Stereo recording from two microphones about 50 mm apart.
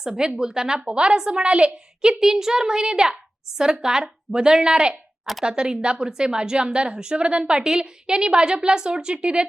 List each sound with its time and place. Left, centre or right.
0.0 s a woman's voice: centre
5.2 s speech: centre
5.5 s a woman's voice: centre